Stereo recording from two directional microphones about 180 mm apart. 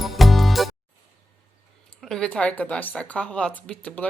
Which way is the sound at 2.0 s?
Centre (ahead or behind).